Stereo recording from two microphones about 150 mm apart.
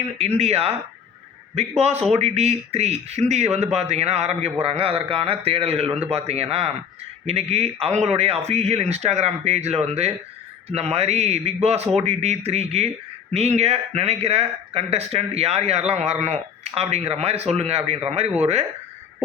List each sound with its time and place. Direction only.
0.2 s a man's voice: 45° right (ahead or behind)